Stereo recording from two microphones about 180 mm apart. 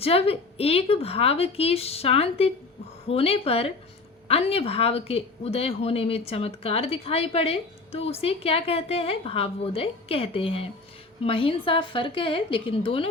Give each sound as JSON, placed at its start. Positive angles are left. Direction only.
{"t": 0.0, "sound": "a woman's voice", "side_deg": 35}